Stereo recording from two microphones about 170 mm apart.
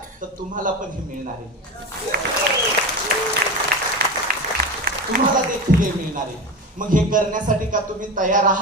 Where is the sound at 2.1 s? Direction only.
60° right (ahead or behind).